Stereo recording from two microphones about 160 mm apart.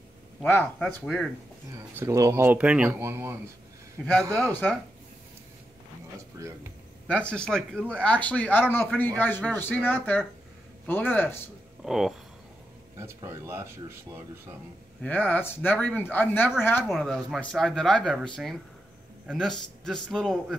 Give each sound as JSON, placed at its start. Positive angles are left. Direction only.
{"t": 0.4, "sound": "a man's voice", "side_deg": 10}
{"t": 0.8, "sound": "speech", "side_deg": 0}
{"t": 1.7, "sound": "speech", "side_deg": -20}
{"t": 4.0, "sound": "a man's voice", "side_deg": 5}
{"t": 7.1, "sound": "a man's voice", "side_deg": 10}
{"t": 11.8, "sound": "speech", "side_deg": 0}
{"t": 12.9, "sound": "speech", "side_deg": -15}
{"t": 15.0, "sound": "a man's voice", "side_deg": 10}
{"t": 16.9, "sound": "speech", "side_deg": 0}